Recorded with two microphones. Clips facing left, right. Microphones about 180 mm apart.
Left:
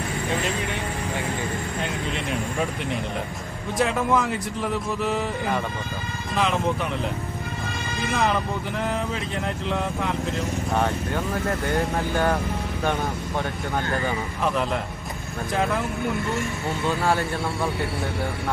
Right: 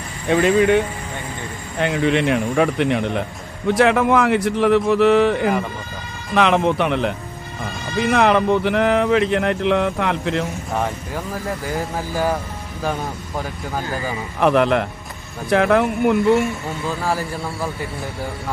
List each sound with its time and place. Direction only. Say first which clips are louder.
0.3 s speech: right 15 dB; 65° right (ahead or behind)
1.8 s speech: right 15 dB; 70° right (ahead or behind)
10.7 s speech: even; centre (ahead or behind)
14.4 s speech: right 10 dB; 70° right (ahead or behind)
16.8 s speech: even; centre (ahead or behind)